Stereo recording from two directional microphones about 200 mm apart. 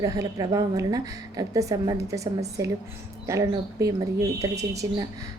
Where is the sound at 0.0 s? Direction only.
15° right (ahead or behind).